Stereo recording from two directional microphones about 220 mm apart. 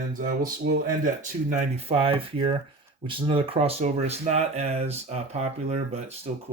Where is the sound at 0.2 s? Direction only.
40° right (ahead or behind).